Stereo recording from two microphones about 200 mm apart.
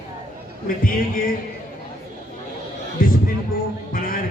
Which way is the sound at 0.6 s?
45° left (ahead or behind).